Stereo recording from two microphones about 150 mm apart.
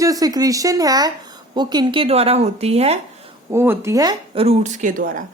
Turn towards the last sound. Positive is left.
turn(degrees=-60)  # may be behind; listen again after turning